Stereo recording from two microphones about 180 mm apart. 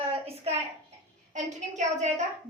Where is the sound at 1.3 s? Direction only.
40° right (ahead or behind).